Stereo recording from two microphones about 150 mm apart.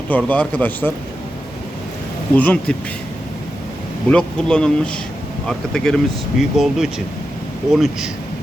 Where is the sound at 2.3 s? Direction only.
10° left (ahead or behind).